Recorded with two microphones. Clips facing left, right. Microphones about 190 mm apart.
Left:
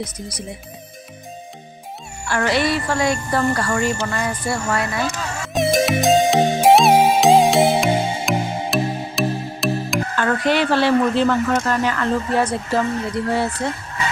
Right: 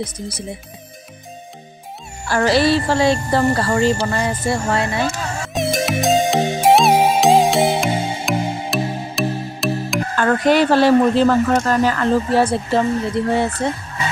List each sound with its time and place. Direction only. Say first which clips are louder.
0.0 s speech: right 3 dB; 25° right (ahead or behind)
2.2 s speech: right 4 dB; 35° right (ahead or behind)
5.5 s music: left 3 dB; centre (ahead or behind)
10.2 s speech: right 4 dB; 40° right (ahead or behind); by 13.5 s 25° right (ahead or behind)